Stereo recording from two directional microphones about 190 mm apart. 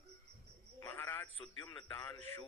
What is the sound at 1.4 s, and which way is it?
Speech, 25° left (ahead or behind).